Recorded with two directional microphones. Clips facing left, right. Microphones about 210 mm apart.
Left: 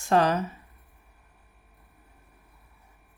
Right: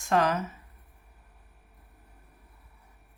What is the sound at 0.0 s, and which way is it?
Speech, 30° left (ahead or behind).